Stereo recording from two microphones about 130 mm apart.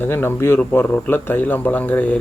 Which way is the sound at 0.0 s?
15° left (ahead or behind).